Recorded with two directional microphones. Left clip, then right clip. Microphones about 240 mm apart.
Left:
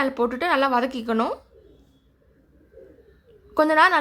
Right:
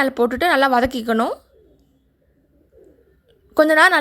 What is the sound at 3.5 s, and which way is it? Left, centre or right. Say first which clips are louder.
Speech: right 4 dB; right.